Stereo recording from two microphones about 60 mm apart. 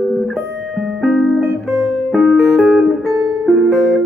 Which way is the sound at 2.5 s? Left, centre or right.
Centre.